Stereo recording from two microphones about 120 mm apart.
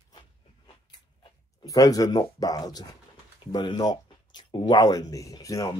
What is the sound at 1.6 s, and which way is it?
Speech, 30° left (ahead or behind).